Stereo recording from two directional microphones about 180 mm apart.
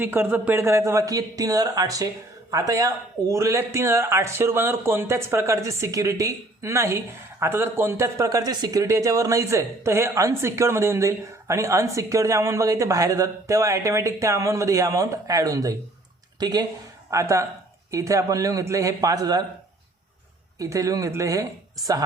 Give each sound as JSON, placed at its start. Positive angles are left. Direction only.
{"t": 0.0, "sound": "speech", "side_deg": -10}
{"t": 20.6, "sound": "speech", "side_deg": -20}